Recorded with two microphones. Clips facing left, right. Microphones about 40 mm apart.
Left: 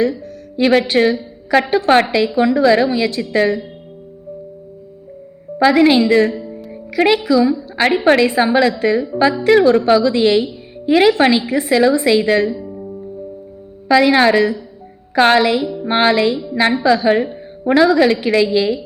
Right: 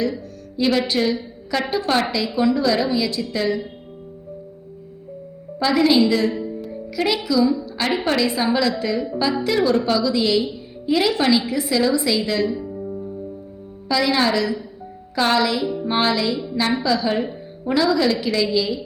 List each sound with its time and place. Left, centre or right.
0.5 s a woman's voice: left
5.5 s a woman's voice: left
7.6 s a woman's voice: left
13.9 s a woman's voice: left